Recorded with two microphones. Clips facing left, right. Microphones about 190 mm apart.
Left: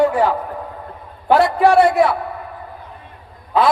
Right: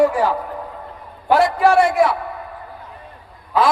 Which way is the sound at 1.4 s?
60° left (ahead or behind).